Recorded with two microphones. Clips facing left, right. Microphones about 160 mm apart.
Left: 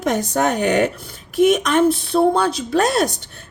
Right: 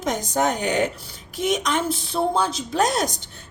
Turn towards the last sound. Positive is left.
turn(degrees=65)  # may be behind; listen again after turning